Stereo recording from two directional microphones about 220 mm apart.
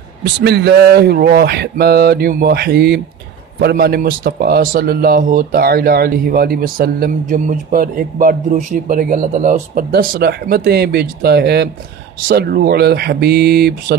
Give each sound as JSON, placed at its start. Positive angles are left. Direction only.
{"t": 0.2, "sound": "speech", "side_deg": -50}